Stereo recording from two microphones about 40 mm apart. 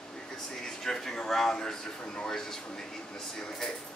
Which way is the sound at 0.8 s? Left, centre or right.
Centre.